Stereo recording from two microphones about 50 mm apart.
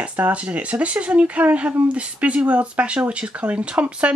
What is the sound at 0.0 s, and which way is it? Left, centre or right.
Speech, right.